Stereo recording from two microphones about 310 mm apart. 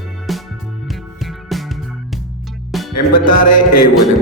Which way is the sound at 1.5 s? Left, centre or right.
Centre.